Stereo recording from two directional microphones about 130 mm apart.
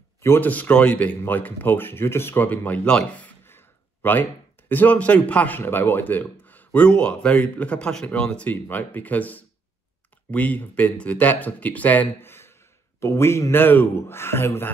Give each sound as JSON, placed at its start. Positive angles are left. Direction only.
{"t": 0.2, "sound": "a man's voice", "side_deg": 15}